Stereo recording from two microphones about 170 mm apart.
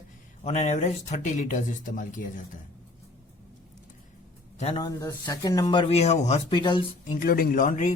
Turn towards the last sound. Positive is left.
turn(degrees=50)  # may be behind; listen again after turning